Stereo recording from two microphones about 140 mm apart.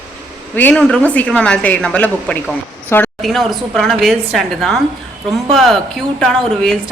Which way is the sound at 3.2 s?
Centre (ahead or behind).